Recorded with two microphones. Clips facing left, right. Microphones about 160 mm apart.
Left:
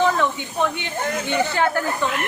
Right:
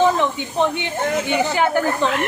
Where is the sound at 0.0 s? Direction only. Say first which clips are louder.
Right 3 dB; 20° right (ahead or behind).